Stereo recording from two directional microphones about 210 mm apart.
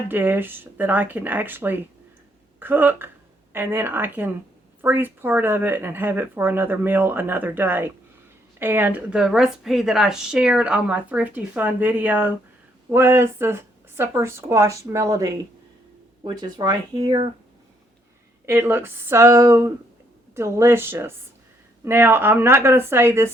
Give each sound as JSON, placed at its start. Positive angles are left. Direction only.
{"t": 0.1, "sound": "a woman's voice", "side_deg": -10}
{"t": 18.4, "sound": "a woman's voice", "side_deg": -10}